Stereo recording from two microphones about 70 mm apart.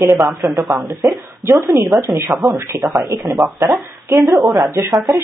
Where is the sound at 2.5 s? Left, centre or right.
Right.